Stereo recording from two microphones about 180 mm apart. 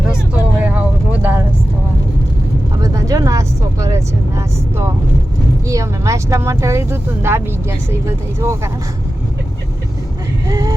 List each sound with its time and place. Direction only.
0.6 s vehicle: 10° right (ahead or behind)
2.7 s vehicle: 20° right (ahead or behind)
5.6 s speech: 15° right (ahead or behind)
10.5 s speech: 15° right (ahead or behind)